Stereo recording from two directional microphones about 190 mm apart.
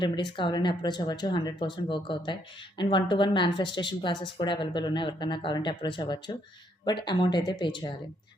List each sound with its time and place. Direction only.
0.0 s speech: 25° left (ahead or behind)